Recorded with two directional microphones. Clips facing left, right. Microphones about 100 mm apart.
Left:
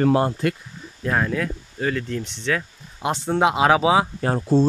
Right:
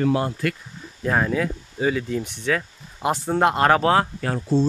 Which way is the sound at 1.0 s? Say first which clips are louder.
Right 1 dB; 5° right (ahead or behind).